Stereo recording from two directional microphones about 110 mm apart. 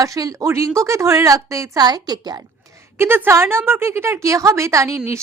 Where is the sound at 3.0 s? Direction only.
20° right (ahead or behind).